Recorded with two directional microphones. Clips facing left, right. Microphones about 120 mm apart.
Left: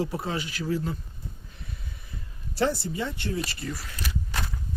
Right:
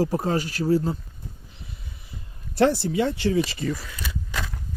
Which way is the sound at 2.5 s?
80° right.